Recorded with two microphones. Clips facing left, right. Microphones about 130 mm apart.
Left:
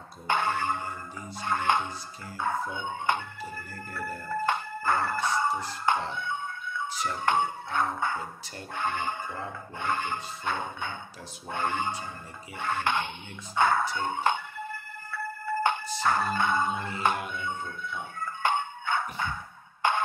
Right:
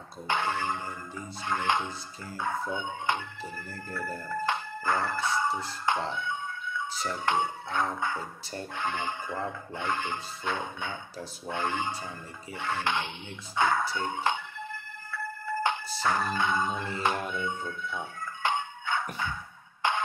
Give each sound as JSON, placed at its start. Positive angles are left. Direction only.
{"t": 0.3, "sound": "speech", "side_deg": 50}
{"t": 6.1, "sound": "a sound", "side_deg": 55}
{"t": 7.2, "sound": "speech", "side_deg": 50}
{"t": 13.9, "sound": "music", "side_deg": 50}
{"t": 17.5, "sound": "speech", "side_deg": 50}
{"t": 18.2, "sound": "music", "side_deg": 55}